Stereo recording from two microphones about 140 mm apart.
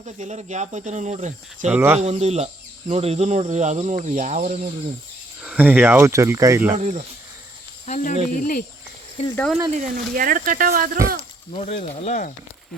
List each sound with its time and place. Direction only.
0.0 s speech: 55° right (ahead or behind)
1.7 s speech: 15° right (ahead or behind)
2.0 s speech: 50° right (ahead or behind)
5.4 s speech: 10° right (ahead or behind)
6.7 s speech: 50° right (ahead or behind)
7.9 s speech: 60° left (ahead or behind); by 8.6 s 75° left (ahead or behind)
9.3 s speech: 10° left (ahead or behind)
9.7 s speech: 75° right (ahead or behind)
11.2 s speech: 50° left (ahead or behind)